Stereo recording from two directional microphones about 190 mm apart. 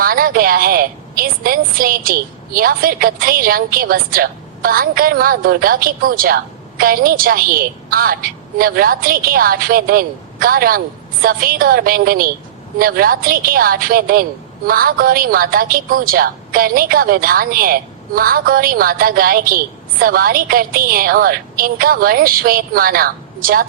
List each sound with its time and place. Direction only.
0.0 s a woman's voice: 50° right (ahead or behind)